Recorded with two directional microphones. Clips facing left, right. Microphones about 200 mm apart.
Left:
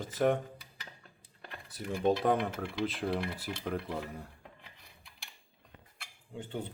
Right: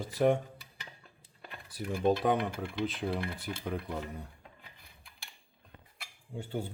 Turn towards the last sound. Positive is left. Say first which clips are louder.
# right 2 dB
turn(degrees=-10)  # may be behind; listen again after turning